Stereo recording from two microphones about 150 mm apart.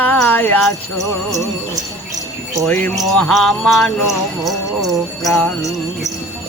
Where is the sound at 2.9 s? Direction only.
Centre (ahead or behind).